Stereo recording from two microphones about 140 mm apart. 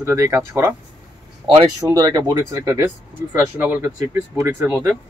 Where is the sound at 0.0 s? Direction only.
20° right (ahead or behind).